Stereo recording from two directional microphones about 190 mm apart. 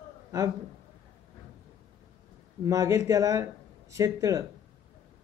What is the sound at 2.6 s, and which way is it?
Speech, 15° right (ahead or behind).